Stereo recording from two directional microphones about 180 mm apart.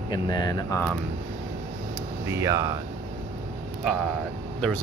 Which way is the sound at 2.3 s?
15° right (ahead or behind).